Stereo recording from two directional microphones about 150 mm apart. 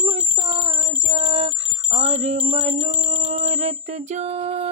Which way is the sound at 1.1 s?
45° right (ahead or behind).